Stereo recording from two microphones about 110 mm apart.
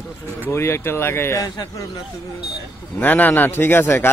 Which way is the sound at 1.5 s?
45° left (ahead or behind).